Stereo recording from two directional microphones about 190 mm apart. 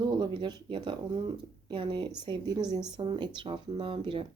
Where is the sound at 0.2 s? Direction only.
25° right (ahead or behind).